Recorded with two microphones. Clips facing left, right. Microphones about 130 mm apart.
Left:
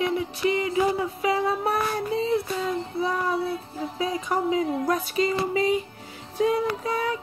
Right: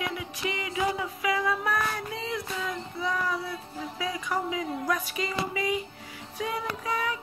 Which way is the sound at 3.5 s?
30° left (ahead or behind).